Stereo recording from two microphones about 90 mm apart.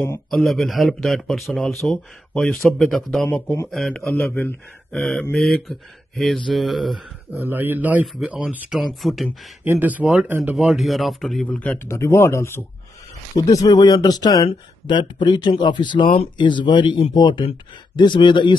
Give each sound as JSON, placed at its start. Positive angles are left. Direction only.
{"t": 0.3, "sound": "speech", "side_deg": 0}
{"t": 4.1, "sound": "speech", "side_deg": 15}
{"t": 7.3, "sound": "a man's voice", "side_deg": -25}
{"t": 9.7, "sound": "a man's voice", "side_deg": -20}
{"t": 10.5, "sound": "speech", "side_deg": -5}
{"t": 11.4, "sound": "speech", "side_deg": 15}
{"t": 11.9, "sound": "speech", "side_deg": 30}
{"t": 13.4, "sound": "speech", "side_deg": 40}
{"t": 14.5, "sound": "speech", "side_deg": 60}